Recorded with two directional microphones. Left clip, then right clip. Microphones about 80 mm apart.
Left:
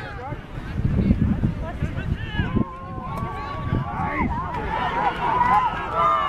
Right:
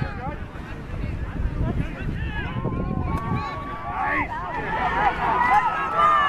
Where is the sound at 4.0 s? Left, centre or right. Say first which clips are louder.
Right 2 dB; right.